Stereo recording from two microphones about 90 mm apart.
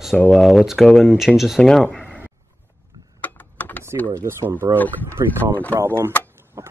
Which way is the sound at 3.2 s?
15° left (ahead or behind).